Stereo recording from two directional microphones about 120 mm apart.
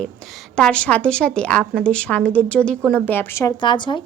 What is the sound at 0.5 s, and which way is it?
A woman's voice, 10° left (ahead or behind).